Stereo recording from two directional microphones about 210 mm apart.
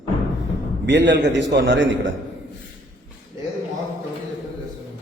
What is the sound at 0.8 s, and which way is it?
A man's voice, 55° right (ahead or behind).